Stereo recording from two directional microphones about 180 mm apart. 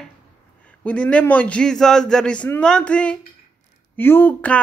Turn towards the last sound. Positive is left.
turn(degrees=10)  # may be behind; listen again after turning